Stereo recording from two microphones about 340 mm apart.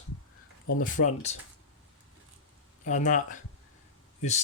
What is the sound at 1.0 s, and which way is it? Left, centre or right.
Speech, left.